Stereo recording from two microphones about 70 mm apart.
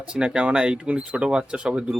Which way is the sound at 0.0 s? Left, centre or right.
Centre.